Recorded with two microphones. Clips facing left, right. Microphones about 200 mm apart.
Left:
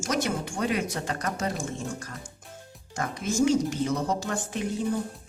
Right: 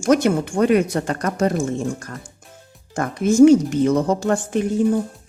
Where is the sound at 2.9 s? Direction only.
55° right (ahead or behind).